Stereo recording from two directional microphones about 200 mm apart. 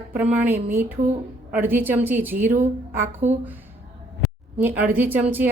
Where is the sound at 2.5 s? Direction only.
35° right (ahead or behind).